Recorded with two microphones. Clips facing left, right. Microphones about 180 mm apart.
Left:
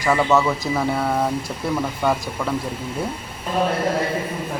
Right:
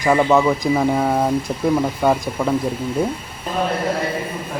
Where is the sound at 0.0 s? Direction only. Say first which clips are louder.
Right 3 dB; 15° right (ahead or behind).